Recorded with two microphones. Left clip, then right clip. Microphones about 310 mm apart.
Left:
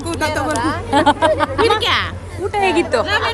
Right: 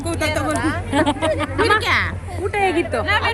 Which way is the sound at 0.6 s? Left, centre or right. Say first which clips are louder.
Left 3 dB; left.